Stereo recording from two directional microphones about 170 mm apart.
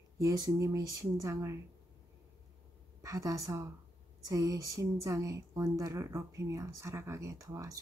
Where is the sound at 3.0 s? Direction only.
20° right (ahead or behind).